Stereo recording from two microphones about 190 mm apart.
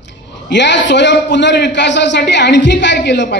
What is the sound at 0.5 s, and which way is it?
A man's voice, 70° left (ahead or behind).